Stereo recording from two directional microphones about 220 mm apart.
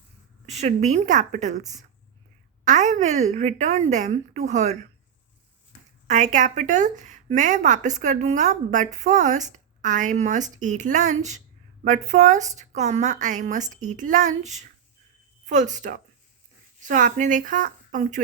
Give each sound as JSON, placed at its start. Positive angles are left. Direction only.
{"t": 0.4, "sound": "speech", "side_deg": -30}
{"t": 6.1, "sound": "speech", "side_deg": -35}